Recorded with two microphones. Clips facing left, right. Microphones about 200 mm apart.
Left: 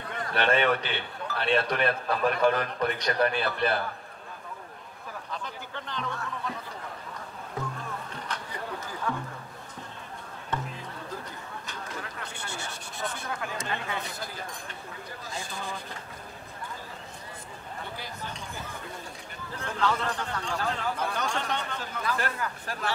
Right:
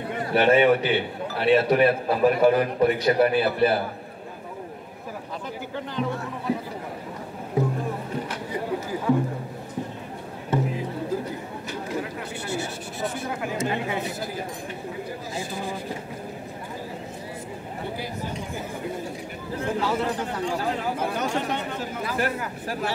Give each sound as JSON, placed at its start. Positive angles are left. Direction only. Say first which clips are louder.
{"t": 0.0, "sound": "a man's voice", "louder": "right 7 dB", "side_deg": -10}
{"t": 5.8, "sound": "a man's voice", "louder": "right 7 dB", "side_deg": -10}
{"t": 7.5, "sound": "music", "louder": "right 11 dB", "side_deg": -20}
{"t": 10.7, "sound": "a sound", "louder": "right 11 dB", "side_deg": -10}
{"t": 13.3, "sound": "a man's voice", "louder": "right 7 dB", "side_deg": -15}
{"t": 19.5, "sound": "a man's voice", "louder": "right 4 dB", "side_deg": -10}